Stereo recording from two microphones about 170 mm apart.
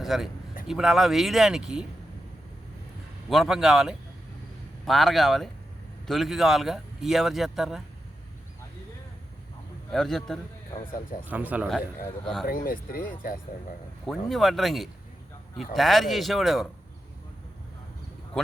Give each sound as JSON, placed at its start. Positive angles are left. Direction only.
{"t": 0.0, "sound": "a man's voice", "side_deg": 0}
{"t": 3.2, "sound": "a man's voice", "side_deg": 0}
{"t": 9.9, "sound": "a man's voice", "side_deg": 0}
{"t": 11.3, "sound": "speech", "side_deg": -10}
{"t": 12.2, "sound": "a man's voice", "side_deg": 5}
{"t": 12.5, "sound": "speech", "side_deg": 55}
{"t": 14.3, "sound": "a man's voice", "side_deg": 0}